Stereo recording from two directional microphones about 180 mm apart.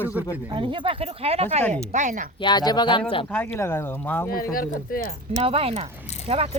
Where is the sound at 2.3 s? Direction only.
25° left (ahead or behind).